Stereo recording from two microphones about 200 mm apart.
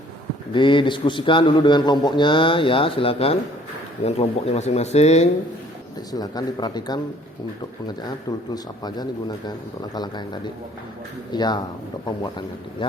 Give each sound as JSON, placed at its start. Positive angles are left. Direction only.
{"t": 0.5, "sound": "a man's voice", "side_deg": 25}
{"t": 6.1, "sound": "a man's voice", "side_deg": 20}
{"t": 8.5, "sound": "a man's voice", "side_deg": 20}